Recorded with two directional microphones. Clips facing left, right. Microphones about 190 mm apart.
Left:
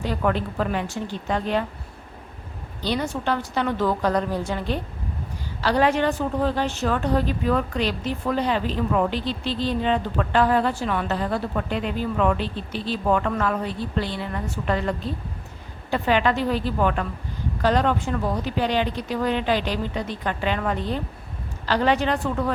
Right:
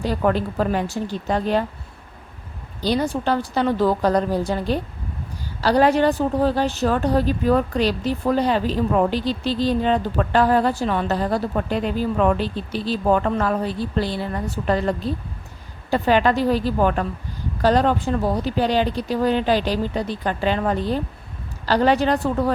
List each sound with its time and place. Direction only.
0.0 s a woman's voice: 35° right (ahead or behind)
2.8 s a woman's voice: 35° right (ahead or behind)